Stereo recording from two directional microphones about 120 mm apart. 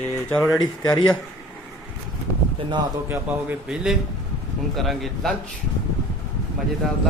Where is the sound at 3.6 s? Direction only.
5° right (ahead or behind).